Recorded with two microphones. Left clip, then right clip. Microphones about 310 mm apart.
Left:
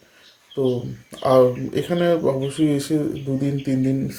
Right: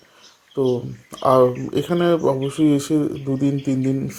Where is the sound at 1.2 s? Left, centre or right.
Right.